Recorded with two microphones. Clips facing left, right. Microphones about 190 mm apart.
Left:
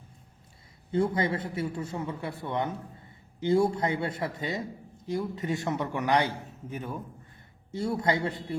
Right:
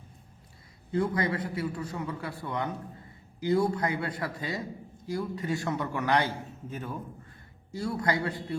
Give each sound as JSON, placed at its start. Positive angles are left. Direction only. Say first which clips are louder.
{"t": 0.9, "sound": "a man's voice", "louder": "left 1 dB", "side_deg": 25}